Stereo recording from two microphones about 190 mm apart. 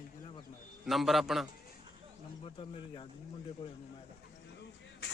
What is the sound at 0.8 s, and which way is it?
Speech, centre (ahead or behind).